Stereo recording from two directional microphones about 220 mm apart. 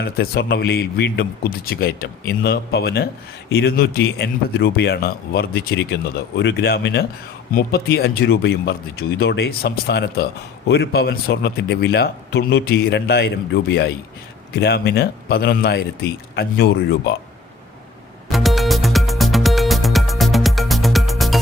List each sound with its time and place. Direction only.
0.0 s a man's voice: 45° left (ahead or behind)
18.3 s music: centre (ahead or behind)